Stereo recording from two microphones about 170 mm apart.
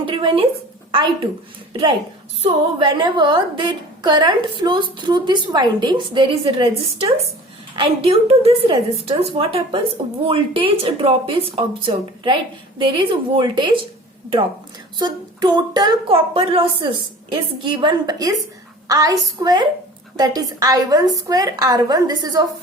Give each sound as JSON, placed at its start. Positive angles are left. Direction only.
{"t": 0.0, "sound": "a woman's voice", "side_deg": -30}
{"t": 14.9, "sound": "a woman's voice", "side_deg": -25}